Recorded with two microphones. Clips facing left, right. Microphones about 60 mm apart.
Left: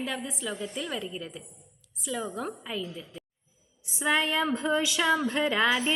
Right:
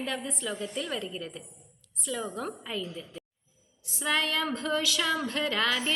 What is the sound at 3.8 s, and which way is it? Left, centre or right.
A woman's voice, centre.